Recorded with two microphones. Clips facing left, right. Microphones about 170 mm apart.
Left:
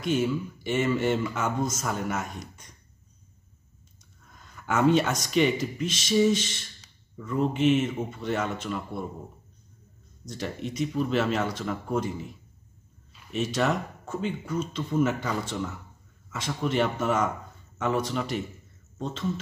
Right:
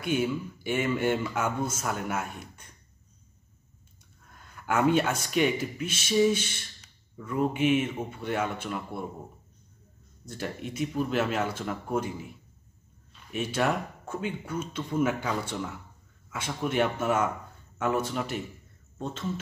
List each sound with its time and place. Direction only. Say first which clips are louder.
0.0 s speech: left 2 dB; 10° right (ahead or behind)
4.4 s a sound: left 1 dB; 10° right (ahead or behind)
5.2 s speech: left 2 dB; 5° right (ahead or behind)
10.4 s speech: left 2 dB; 10° right (ahead or behind)